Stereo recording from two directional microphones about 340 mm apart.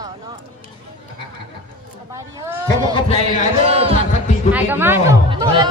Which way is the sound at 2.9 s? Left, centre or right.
Centre.